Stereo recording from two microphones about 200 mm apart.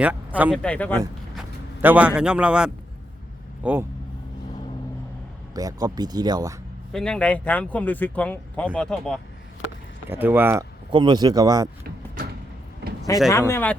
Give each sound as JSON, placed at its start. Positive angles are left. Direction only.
{"t": 0.0, "sound": "speech", "side_deg": -5}
{"t": 0.6, "sound": "speech", "side_deg": 5}
{"t": 1.4, "sound": "speech", "side_deg": -10}
{"t": 5.5, "sound": "speech", "side_deg": -20}
{"t": 6.9, "sound": "speech", "side_deg": 5}
{"t": 10.1, "sound": "speech", "side_deg": -10}
{"t": 10.9, "sound": "speech", "side_deg": -20}
{"t": 13.1, "sound": "speech", "side_deg": 15}